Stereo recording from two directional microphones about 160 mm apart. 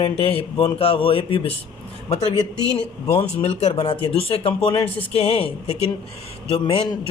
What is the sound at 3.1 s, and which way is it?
A man's voice, 35° left (ahead or behind).